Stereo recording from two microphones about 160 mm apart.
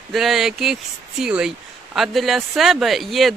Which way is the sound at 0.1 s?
Centre (ahead or behind).